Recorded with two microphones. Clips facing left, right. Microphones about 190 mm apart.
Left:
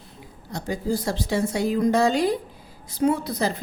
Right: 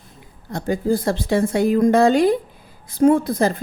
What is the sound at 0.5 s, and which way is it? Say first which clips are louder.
A woman's voice: right 6 dB; 55° right (ahead or behind).